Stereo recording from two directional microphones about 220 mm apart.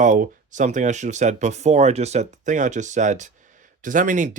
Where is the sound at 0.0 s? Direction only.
35° right (ahead or behind).